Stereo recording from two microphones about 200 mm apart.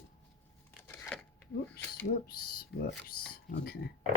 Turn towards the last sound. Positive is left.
turn(degrees=55)  # may be behind; listen again after turning